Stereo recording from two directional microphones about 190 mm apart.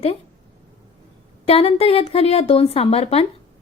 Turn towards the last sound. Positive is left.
turn(degrees=30)  # may be behind; listen again after turning